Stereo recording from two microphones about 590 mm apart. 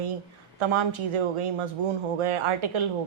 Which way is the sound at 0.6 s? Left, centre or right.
Right.